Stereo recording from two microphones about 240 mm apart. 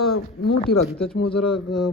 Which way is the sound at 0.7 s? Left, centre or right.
Left.